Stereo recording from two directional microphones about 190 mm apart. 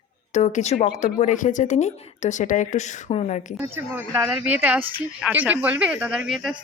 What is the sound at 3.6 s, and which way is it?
Speech, 15° right (ahead or behind).